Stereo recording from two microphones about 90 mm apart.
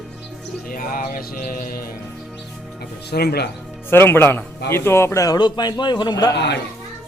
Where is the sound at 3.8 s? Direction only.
25° left (ahead or behind).